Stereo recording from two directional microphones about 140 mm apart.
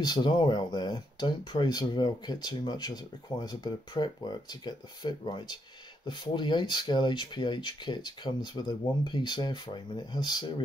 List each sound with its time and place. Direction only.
0.0 s speech: 30° left (ahead or behind)